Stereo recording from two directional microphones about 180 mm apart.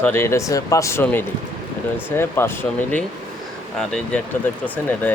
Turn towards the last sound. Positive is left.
turn(degrees=10)  # may be behind; listen again after turning